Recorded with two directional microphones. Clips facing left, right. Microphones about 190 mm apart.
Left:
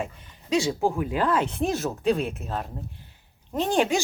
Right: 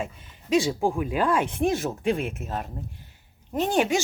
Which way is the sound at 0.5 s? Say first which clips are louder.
Right 1 dB; 15° right (ahead or behind).